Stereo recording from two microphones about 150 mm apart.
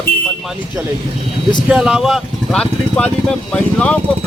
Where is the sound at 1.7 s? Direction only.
5° right (ahead or behind).